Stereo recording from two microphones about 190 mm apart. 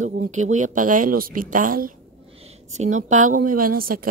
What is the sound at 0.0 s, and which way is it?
Speech, 45° right (ahead or behind).